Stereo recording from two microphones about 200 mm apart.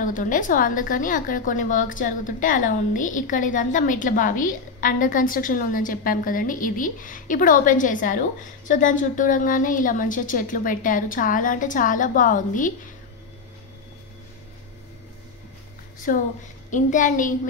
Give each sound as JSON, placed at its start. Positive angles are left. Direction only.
{"t": 0.0, "sound": "a woman's voice", "side_deg": 40}
{"t": 16.1, "sound": "a woman's voice", "side_deg": 45}